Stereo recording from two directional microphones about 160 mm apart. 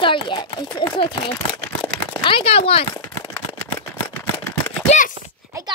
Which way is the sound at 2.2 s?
35° left (ahead or behind).